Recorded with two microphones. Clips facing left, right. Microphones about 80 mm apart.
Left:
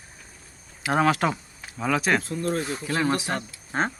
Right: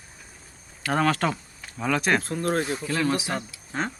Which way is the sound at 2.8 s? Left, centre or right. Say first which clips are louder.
Left 4 dB; left.